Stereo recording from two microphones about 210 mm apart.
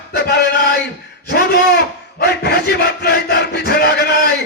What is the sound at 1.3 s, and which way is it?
Battle cry, 50° left (ahead or behind).